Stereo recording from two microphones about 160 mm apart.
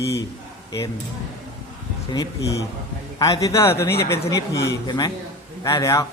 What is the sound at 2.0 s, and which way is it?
Speech, 20° left (ahead or behind).